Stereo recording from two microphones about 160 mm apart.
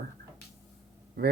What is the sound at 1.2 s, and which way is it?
Speech, 75° right (ahead or behind).